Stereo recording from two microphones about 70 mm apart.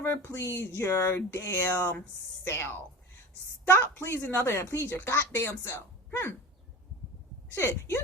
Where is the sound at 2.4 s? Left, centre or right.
Left.